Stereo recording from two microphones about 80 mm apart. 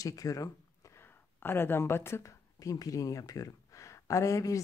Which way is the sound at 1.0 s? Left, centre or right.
Left.